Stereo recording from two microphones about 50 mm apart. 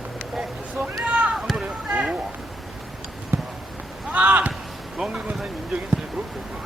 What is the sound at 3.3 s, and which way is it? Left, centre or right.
Basketball bounce, right.